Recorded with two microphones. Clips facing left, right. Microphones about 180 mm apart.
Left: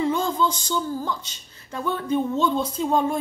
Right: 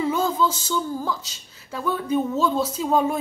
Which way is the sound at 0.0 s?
5° right (ahead or behind).